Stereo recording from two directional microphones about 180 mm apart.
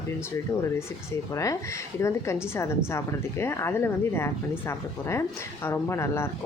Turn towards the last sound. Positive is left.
turn(degrees=15)  # may be behind; listen again after turning